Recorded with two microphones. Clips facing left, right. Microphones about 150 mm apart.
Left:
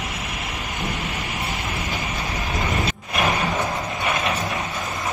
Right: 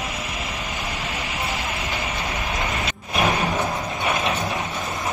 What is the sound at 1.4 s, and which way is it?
Vehicle, centre (ahead or behind).